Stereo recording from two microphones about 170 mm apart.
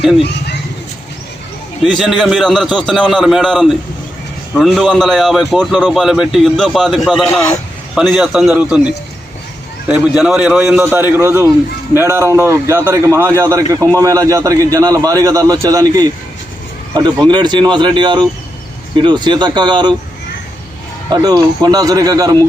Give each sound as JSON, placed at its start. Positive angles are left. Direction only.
{"t": 2.0, "sound": "a man's voice", "side_deg": 0}
{"t": 9.9, "sound": "a man's voice", "side_deg": -5}
{"t": 21.1, "sound": "a man's voice", "side_deg": -25}